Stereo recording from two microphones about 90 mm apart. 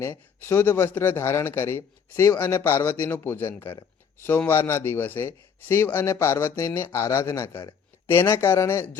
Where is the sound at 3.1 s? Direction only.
25° left (ahead or behind).